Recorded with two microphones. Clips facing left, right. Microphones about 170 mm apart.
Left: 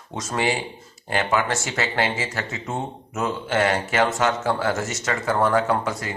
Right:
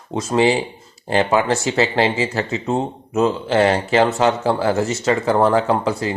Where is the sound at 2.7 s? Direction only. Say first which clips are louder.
Right 8 dB; 35° right (ahead or behind).